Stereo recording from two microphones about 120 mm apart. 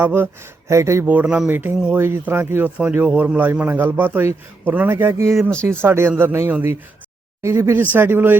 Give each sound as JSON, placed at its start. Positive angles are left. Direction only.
{"t": 0.0, "sound": "a man's voice", "side_deg": -20}